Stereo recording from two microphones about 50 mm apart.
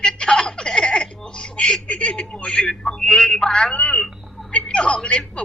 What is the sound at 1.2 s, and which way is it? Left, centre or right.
A man's voice, centre.